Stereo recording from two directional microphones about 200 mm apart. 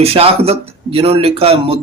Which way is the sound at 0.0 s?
30° right (ahead or behind).